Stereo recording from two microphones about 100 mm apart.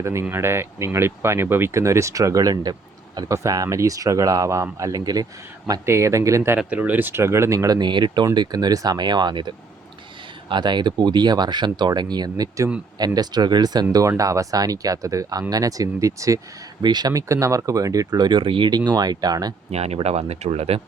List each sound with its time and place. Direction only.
0.0 s speech: 25° right (ahead or behind)
5.8 s speech: 30° right (ahead or behind)
6.6 s speech: 15° right (ahead or behind); by 9.5 s 45° right (ahead or behind)
10.5 s speech: 50° right (ahead or behind)
13.9 s speech: 35° right (ahead or behind)
16.8 s speech: 45° right (ahead or behind)
18.9 s speech: 40° right (ahead or behind)
19.7 s speech: 90° right